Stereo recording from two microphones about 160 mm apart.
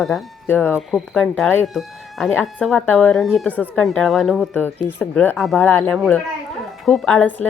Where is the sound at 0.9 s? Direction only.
Centre (ahead or behind).